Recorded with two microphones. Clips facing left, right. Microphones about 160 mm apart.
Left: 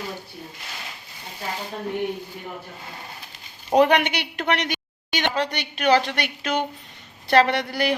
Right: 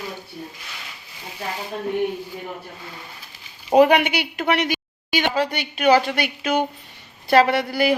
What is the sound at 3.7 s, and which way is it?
A woman's voice, 5° right (ahead or behind).